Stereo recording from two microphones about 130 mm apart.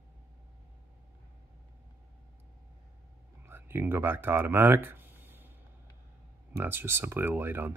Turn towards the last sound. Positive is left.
turn(degrees=-15)  # may be behind; listen again after turning